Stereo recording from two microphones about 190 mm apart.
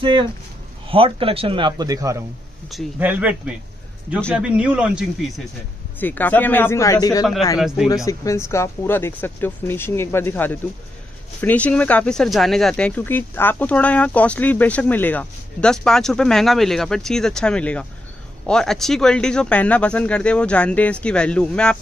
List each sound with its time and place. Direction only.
0.0 s a man's voice: 25° right (ahead or behind); by 5.3 s 5° right (ahead or behind)
5.9 s speech: 10° left (ahead or behind)
7.5 s speech: 5° right (ahead or behind)
7.9 s speech: 15° left (ahead or behind)